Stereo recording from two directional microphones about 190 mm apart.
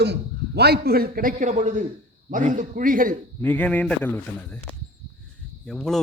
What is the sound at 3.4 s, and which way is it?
A man's voice, 5° left (ahead or behind).